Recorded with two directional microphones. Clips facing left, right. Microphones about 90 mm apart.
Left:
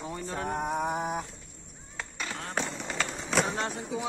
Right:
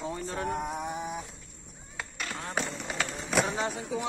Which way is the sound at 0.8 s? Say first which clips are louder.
Left 4 dB; 55° left (ahead or behind).